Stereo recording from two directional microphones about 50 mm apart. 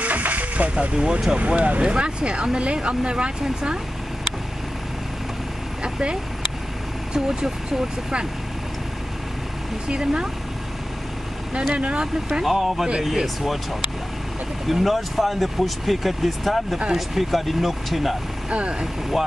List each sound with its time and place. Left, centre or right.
0.0 s a sound: right
0.9 s speech: centre
5.8 s vehicle: centre
7.2 s speech: centre
9.8 s speech: centre
11.7 s speech: right
12.4 s speech: centre
14.7 s speech: centre
16.7 s speech: centre
18.5 s speech: right